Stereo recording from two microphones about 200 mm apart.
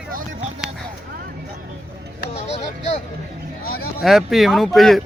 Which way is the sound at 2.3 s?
30° left (ahead or behind).